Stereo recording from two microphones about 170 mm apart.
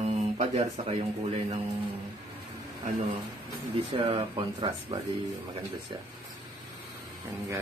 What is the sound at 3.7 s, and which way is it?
Speech, 35° right (ahead or behind).